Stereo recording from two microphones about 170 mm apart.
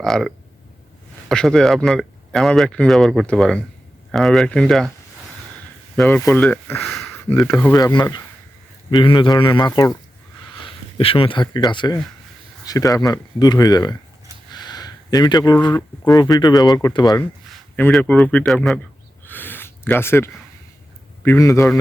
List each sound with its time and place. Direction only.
0.0 s speech: centre (ahead or behind)
6.0 s speech: 5° left (ahead or behind)
7.1 s speech: 10° left (ahead or behind)
10.6 s speech: 30° left (ahead or behind)
14.5 s a sound: 25° left (ahead or behind)
15.6 s speech: 25° left (ahead or behind)
17.9 s speech: 5° left (ahead or behind)
19.2 s a sound: 10° left (ahead or behind)
21.2 s speech: 15° left (ahead or behind)